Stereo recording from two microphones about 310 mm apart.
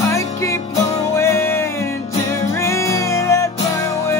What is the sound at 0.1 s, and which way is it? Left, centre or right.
Music, centre.